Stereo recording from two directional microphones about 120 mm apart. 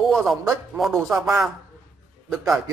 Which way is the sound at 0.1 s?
Centre (ahead or behind).